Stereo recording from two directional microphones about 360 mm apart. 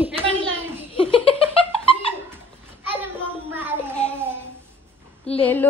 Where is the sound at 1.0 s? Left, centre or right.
Centre.